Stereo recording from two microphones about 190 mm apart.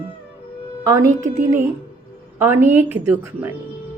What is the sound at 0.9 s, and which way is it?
Speech, 15° right (ahead or behind).